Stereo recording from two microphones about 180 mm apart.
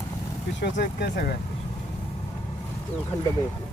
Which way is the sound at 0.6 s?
70° left (ahead or behind).